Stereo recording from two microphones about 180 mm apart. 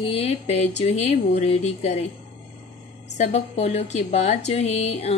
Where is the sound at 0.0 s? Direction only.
35° left (ahead or behind).